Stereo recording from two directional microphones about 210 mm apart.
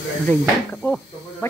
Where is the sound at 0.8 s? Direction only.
10° left (ahead or behind).